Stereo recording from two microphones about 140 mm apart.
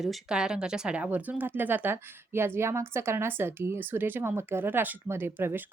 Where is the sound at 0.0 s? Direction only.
5° right (ahead or behind).